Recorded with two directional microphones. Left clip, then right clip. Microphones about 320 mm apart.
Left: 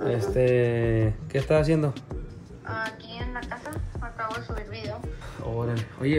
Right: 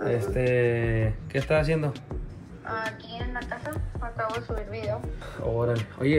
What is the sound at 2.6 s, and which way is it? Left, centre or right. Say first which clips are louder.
Speech: right 1 dB; centre.